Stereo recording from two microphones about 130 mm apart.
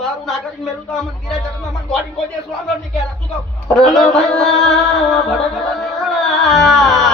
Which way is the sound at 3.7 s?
Centre (ahead or behind).